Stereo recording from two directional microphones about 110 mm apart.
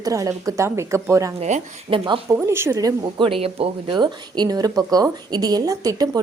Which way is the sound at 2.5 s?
25° right (ahead or behind).